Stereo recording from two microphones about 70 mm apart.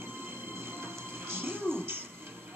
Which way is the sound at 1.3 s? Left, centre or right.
Right.